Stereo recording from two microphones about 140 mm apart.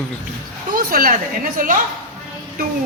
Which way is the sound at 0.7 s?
80° right.